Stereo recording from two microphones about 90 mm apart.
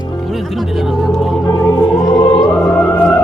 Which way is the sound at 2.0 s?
55° left (ahead or behind).